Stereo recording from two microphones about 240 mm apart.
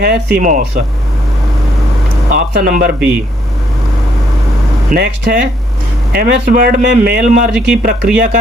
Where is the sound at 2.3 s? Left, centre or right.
Right.